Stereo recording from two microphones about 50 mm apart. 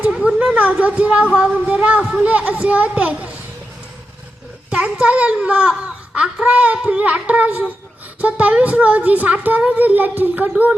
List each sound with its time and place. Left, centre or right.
0.5 s speech: right
4.7 s speech: right